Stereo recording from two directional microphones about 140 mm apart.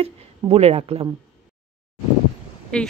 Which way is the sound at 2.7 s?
5° left (ahead or behind).